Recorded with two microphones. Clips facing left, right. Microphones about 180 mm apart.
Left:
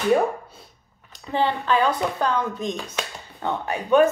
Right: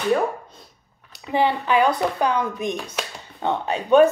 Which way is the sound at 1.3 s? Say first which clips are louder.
Right 2 dB; 15° right (ahead or behind).